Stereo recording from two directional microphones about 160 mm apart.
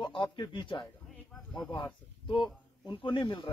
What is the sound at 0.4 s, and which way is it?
Speech, 30° left (ahead or behind).